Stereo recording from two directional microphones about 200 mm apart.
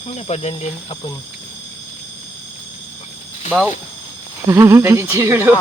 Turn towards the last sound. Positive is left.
turn(degrees=-10)  # may be behind; listen again after turning